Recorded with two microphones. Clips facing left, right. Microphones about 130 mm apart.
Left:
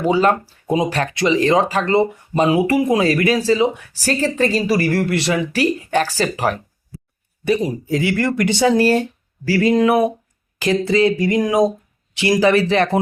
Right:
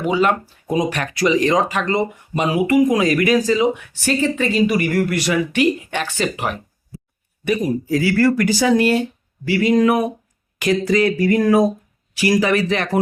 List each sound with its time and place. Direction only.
0.0 s speech: 35° left (ahead or behind)